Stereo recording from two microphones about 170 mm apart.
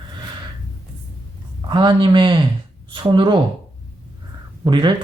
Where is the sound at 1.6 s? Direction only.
25° right (ahead or behind).